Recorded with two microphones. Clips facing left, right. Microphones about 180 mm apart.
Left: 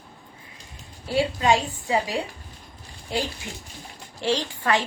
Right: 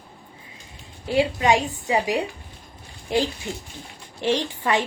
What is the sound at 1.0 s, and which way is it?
A woman's voice, 20° right (ahead or behind).